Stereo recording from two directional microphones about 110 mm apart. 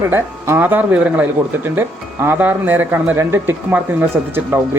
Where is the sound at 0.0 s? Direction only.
25° right (ahead or behind).